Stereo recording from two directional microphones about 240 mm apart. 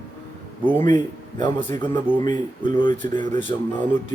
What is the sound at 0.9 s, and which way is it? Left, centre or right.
Speech, centre.